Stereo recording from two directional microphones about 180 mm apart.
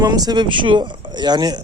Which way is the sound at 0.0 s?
20° right (ahead or behind).